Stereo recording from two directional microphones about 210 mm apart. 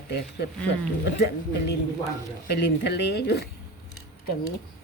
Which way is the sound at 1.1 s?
55° left (ahead or behind).